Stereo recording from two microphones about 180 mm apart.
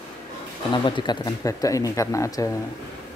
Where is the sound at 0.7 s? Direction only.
25° left (ahead or behind).